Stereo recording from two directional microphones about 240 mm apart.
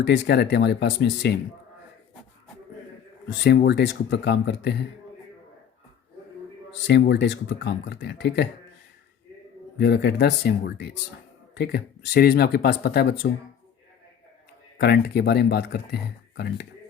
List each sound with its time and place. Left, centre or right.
0.0 s speech: left
3.2 s speech: left
6.8 s speech: left
9.7 s speech: left
14.8 s speech: left